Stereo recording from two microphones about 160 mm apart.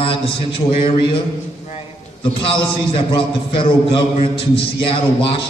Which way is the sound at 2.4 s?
35° left (ahead or behind).